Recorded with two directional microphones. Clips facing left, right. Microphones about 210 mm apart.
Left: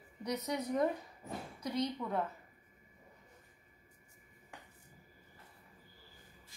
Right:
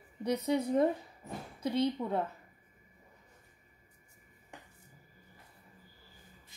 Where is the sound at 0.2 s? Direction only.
25° right (ahead or behind).